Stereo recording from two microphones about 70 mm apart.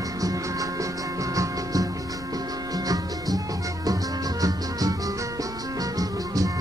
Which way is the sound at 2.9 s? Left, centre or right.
Right.